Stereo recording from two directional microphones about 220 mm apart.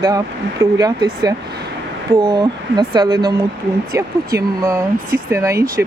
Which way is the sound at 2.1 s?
20° right (ahead or behind).